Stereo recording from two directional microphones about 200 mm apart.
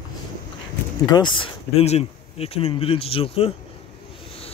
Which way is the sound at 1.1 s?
25° left (ahead or behind).